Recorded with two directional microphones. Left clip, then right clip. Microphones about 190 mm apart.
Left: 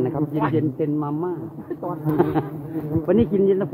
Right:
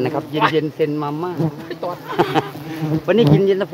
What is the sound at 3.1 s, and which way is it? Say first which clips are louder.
Speech: right 4 dB; 10° right (ahead or behind).